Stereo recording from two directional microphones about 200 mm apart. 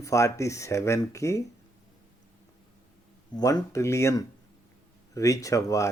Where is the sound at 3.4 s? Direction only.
15° left (ahead or behind).